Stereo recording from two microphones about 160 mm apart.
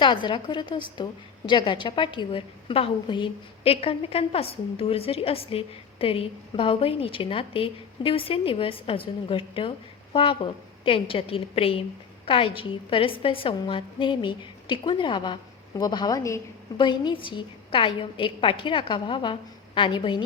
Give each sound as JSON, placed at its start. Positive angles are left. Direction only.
{"t": 0.0, "sound": "a woman's voice", "side_deg": 30}